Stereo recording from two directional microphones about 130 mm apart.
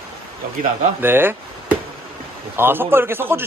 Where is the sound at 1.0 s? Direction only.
15° right (ahead or behind).